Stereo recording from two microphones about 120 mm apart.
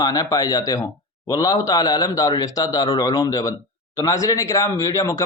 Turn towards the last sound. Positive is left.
turn(degrees=25)  # may be behind; listen again after turning